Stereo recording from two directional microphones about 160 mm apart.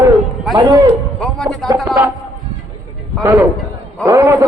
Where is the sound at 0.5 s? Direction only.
25° right (ahead or behind).